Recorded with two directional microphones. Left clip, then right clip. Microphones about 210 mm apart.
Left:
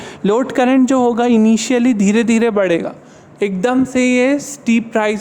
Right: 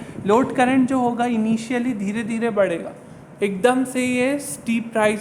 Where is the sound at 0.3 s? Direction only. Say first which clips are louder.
Left 3 dB; 50° left (ahead or behind).